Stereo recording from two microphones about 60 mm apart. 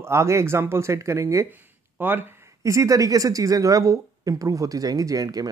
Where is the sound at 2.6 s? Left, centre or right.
Right.